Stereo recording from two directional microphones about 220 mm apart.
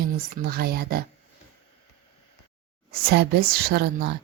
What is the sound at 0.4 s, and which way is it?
Speech, 45° right (ahead or behind).